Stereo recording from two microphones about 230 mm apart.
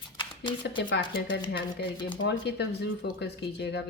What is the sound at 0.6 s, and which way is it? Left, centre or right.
Speech, left.